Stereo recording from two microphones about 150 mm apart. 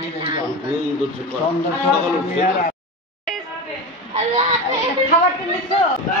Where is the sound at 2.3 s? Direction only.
55° left (ahead or behind).